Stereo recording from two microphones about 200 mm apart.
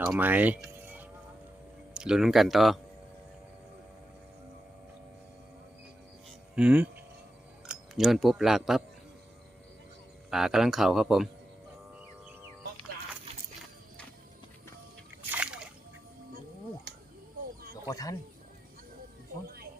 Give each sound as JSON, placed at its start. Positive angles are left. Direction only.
{"t": 0.0, "sound": "speech", "side_deg": -5}
{"t": 6.6, "sound": "speech", "side_deg": -5}
{"t": 7.9, "sound": "speech", "side_deg": 0}
{"t": 10.2, "sound": "speech", "side_deg": 0}
{"t": 15.3, "sound": "splash", "side_deg": -5}
{"t": 17.8, "sound": "speech", "side_deg": 15}